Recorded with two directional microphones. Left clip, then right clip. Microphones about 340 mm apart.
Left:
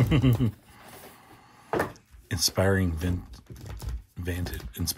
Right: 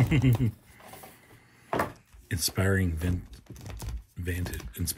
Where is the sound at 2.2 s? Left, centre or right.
Centre.